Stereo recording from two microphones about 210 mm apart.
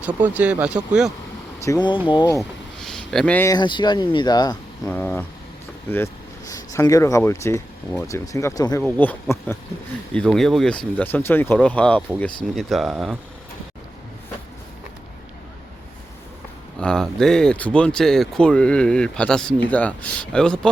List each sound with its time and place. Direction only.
0.0 s speech: 10° right (ahead or behind)
1.6 s speech: 20° left (ahead or behind)
2.4 s speech: centre (ahead or behind); by 4.5 s 20° left (ahead or behind)
4.9 s speech: 10° left (ahead or behind)
8.8 s speech: 5° left (ahead or behind)
16.8 s speech: 5° left (ahead or behind)